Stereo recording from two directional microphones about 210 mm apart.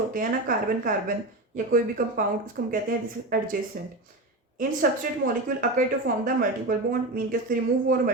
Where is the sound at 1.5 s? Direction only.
40° right (ahead or behind).